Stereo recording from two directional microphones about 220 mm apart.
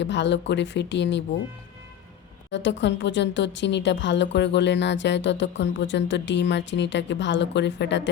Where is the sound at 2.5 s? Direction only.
55° left (ahead or behind).